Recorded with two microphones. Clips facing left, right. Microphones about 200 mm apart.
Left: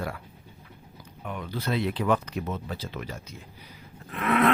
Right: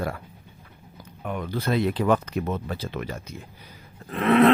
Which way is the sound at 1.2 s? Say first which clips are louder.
Right 4 dB; 50° right (ahead or behind).